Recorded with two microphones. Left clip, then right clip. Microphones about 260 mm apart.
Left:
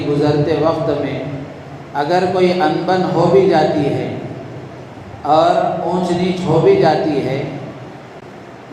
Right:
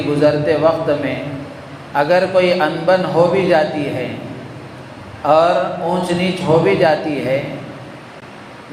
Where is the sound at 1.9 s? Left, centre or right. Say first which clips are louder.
Right 2 dB; right.